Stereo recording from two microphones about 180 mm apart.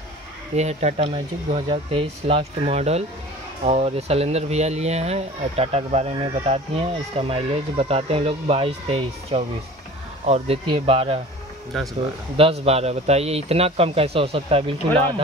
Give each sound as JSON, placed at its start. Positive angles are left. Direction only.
{"t": 0.6, "sound": "speech", "side_deg": -40}
{"t": 11.7, "sound": "speech", "side_deg": 0}
{"t": 12.4, "sound": "speech", "side_deg": -35}